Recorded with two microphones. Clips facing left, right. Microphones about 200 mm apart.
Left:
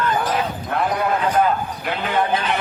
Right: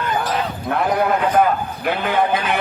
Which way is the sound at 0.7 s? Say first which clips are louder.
Right 4 dB; 60° right (ahead or behind).